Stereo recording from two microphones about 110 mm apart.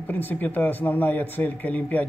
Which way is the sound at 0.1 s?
15° left (ahead or behind).